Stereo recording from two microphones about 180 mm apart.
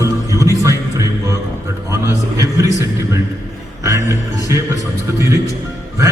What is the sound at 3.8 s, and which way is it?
Speech, 15° right (ahead or behind).